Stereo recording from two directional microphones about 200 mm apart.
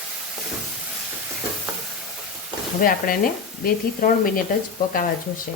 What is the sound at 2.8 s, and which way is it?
Speech, 45° left (ahead or behind).